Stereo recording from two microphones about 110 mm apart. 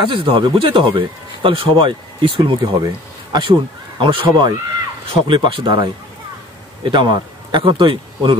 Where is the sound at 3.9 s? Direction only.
45° right (ahead or behind).